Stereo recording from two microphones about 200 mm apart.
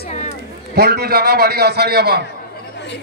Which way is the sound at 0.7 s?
50° right (ahead or behind).